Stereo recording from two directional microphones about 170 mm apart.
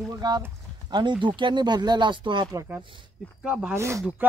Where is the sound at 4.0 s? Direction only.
5° right (ahead or behind).